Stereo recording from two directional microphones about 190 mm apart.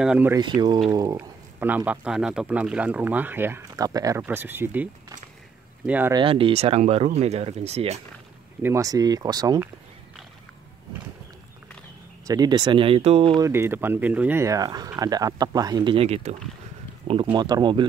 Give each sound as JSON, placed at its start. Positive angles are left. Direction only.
{"t": 0.0, "sound": "speech", "side_deg": -5}
{"t": 0.3, "sound": "speech", "side_deg": -20}
{"t": 5.9, "sound": "speech", "side_deg": -10}
{"t": 6.1, "sound": "speech", "side_deg": -30}
{"t": 8.6, "sound": "speech", "side_deg": -15}
{"t": 12.3, "sound": "speech", "side_deg": -20}
{"t": 13.4, "sound": "speech", "side_deg": -15}